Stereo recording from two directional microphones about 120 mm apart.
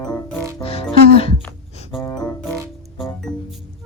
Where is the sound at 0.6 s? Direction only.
55° left (ahead or behind).